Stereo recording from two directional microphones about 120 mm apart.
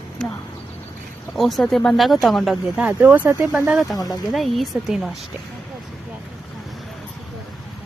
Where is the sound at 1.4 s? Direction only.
Centre (ahead or behind).